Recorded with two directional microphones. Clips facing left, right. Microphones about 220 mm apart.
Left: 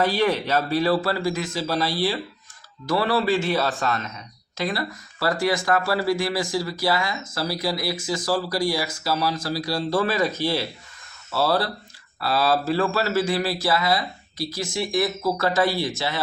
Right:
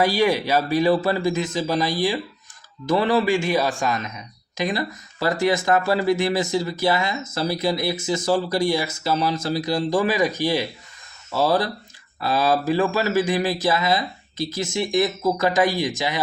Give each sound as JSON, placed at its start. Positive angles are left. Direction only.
{"t": 0.0, "sound": "a man's voice", "side_deg": -10}